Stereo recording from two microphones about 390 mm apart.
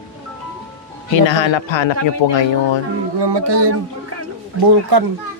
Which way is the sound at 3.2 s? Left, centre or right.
Right.